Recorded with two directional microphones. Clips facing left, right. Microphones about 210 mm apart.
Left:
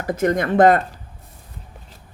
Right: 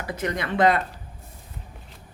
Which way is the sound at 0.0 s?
45° left (ahead or behind).